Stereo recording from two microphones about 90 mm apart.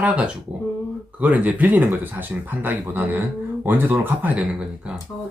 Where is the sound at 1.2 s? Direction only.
15° right (ahead or behind).